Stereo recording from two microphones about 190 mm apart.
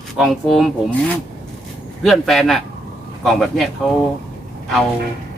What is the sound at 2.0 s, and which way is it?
Speech, centre (ahead or behind).